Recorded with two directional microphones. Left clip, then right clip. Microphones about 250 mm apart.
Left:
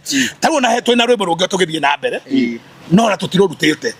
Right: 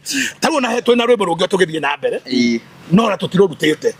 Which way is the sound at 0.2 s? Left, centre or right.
Centre.